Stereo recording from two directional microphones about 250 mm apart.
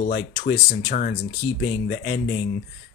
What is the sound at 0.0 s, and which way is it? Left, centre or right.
Speech, left.